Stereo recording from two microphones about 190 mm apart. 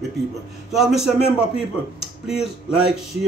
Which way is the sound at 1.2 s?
30° left (ahead or behind).